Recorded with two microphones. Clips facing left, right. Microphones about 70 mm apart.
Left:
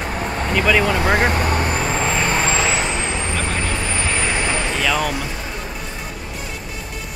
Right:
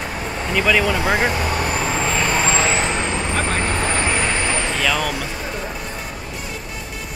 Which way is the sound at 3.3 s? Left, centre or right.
Right.